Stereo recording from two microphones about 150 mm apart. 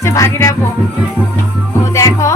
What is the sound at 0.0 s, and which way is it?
Music, 20° left (ahead or behind).